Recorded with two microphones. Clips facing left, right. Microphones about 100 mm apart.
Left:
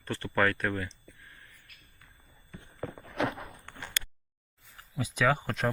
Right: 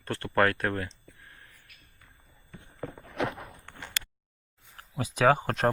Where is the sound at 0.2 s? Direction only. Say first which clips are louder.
Right 3 dB; 50° right (ahead or behind).